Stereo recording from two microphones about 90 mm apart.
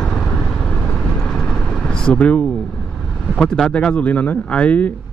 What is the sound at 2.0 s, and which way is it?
Speech, 10° left (ahead or behind).